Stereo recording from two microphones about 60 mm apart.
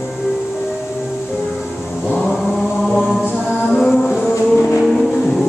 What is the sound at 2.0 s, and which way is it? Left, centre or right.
Vehicle, centre.